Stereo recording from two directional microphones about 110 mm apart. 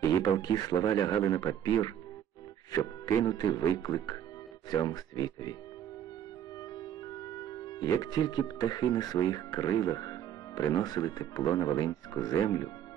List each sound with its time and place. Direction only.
0.0 s speech: 35° left (ahead or behind)
6.8 s speech: 40° left (ahead or behind)